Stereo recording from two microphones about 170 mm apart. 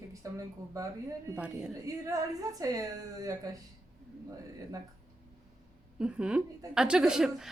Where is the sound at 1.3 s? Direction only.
5° right (ahead or behind).